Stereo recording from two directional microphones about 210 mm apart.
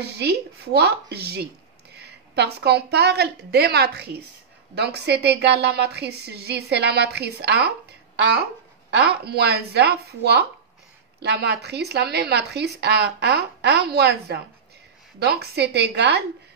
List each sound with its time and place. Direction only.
0.0 s speech: 50° right (ahead or behind)
8.9 s speech: 50° right (ahead or behind)